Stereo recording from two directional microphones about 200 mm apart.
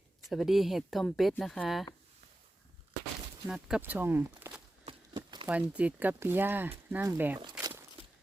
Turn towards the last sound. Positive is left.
turn(degrees=-15)  # may be behind; listen again after turning